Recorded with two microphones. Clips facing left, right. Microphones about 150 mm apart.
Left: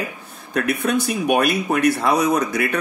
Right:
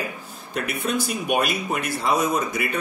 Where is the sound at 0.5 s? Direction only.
60° left (ahead or behind).